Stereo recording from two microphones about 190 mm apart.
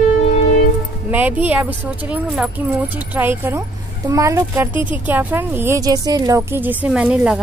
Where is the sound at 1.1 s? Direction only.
10° right (ahead or behind).